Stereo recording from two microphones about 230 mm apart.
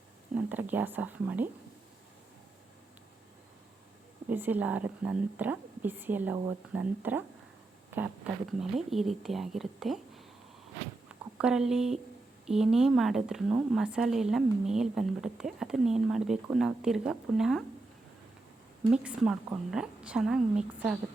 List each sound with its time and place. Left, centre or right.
0.3 s a woman's voice: centre
4.3 s a woman's voice: centre
8.3 s a woman's voice: centre
11.3 s a woman's voice: centre
18.9 s a woman's voice: centre